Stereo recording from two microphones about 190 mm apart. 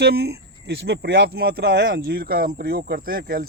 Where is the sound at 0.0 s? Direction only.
60° right (ahead or behind).